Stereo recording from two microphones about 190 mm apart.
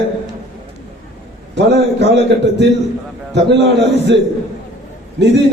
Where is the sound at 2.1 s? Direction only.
70° right (ahead or behind).